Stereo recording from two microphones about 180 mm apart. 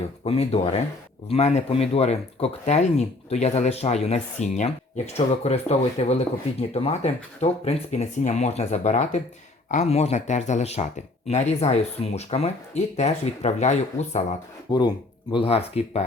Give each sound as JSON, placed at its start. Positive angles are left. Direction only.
{"t": 0.3, "sound": "speech", "side_deg": 35}
{"t": 14.7, "sound": "speech", "side_deg": 25}